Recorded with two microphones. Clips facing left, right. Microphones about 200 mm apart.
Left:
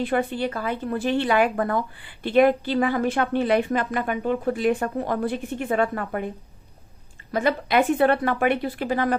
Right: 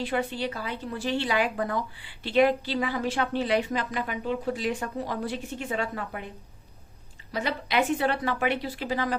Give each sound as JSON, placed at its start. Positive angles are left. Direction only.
{"t": 0.0, "sound": "a woman's voice", "side_deg": 55}